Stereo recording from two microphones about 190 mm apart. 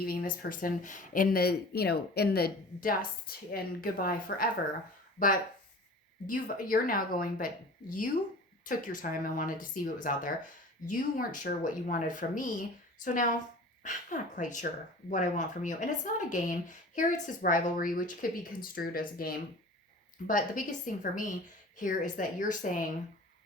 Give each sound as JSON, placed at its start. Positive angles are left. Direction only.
{"t": 0.0, "sound": "speech", "side_deg": 50}
{"t": 6.2, "sound": "speech", "side_deg": 45}